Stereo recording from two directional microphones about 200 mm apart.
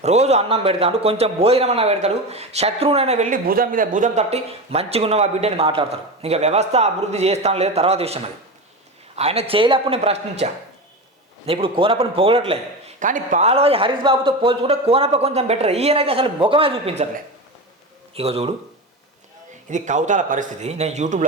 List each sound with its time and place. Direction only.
0.0 s a man's voice: 35° right (ahead or behind)
18.1 s a man's voice: 30° right (ahead or behind)
19.7 s a man's voice: 40° right (ahead or behind)